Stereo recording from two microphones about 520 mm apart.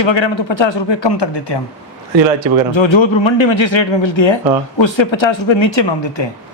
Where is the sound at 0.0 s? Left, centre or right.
Left.